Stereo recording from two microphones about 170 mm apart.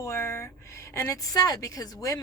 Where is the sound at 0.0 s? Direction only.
15° left (ahead or behind).